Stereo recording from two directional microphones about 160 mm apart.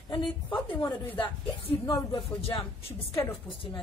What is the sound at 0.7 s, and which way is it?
Speech, 10° left (ahead or behind).